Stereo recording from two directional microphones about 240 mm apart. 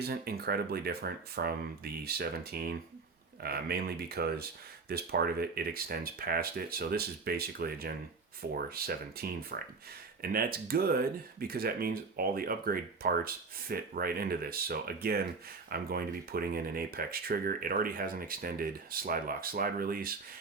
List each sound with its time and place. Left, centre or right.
0.0 s speech: right